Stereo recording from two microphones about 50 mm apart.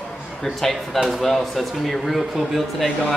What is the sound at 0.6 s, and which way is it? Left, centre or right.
Speech, centre.